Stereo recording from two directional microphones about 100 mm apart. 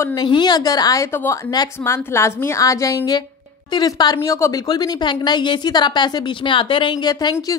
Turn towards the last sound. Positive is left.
turn(degrees=45)  # may be behind; listen again after turning